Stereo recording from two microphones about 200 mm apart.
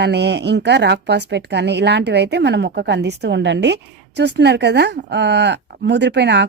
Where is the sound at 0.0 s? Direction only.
55° right (ahead or behind).